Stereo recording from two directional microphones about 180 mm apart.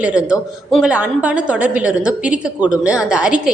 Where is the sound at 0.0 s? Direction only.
5° right (ahead or behind).